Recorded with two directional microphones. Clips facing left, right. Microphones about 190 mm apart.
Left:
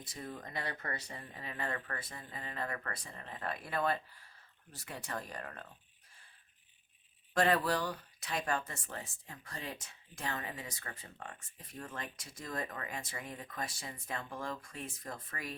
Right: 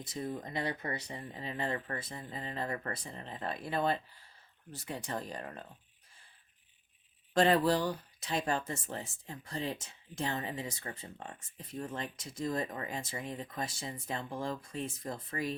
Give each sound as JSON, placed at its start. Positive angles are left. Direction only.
{"t": 0.0, "sound": "speech", "side_deg": -20}
{"t": 7.3, "sound": "speech", "side_deg": -25}